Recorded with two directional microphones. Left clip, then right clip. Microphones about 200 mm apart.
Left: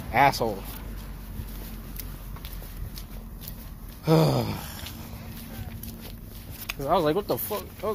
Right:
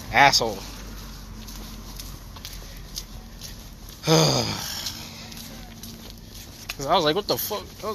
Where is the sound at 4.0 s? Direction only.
Centre (ahead or behind).